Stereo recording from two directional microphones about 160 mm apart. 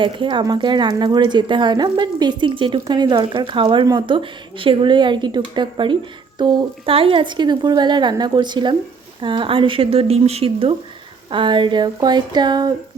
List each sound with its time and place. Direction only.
0.0 s speech: 30° right (ahead or behind)